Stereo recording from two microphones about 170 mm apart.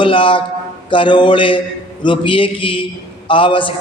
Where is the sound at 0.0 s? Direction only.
30° left (ahead or behind).